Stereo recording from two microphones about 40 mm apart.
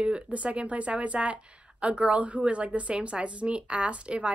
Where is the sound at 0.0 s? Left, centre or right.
Right.